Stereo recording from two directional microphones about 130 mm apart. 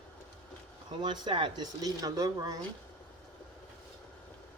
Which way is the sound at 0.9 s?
35° right (ahead or behind).